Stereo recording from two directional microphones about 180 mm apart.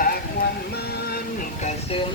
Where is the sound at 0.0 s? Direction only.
55° left (ahead or behind).